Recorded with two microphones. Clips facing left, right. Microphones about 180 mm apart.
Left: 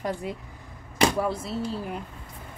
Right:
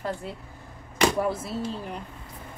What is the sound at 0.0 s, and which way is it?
Speech, 15° left (ahead or behind).